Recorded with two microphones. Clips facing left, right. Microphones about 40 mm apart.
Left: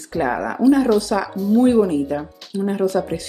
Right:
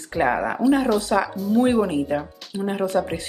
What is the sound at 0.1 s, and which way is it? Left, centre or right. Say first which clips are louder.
Speech: even; right.